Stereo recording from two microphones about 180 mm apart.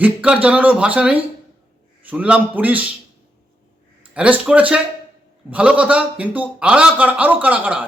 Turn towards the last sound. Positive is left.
turn(degrees=-10)  # may be behind; listen again after turning